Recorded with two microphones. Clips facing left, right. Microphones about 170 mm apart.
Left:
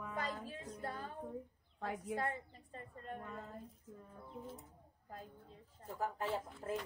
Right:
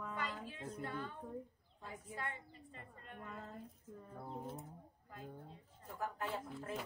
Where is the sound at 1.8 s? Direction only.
85° left.